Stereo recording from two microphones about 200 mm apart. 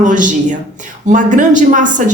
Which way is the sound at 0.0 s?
40° right (ahead or behind).